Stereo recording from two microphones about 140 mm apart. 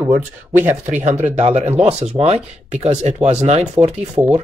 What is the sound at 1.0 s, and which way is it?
Speech, 60° right (ahead or behind).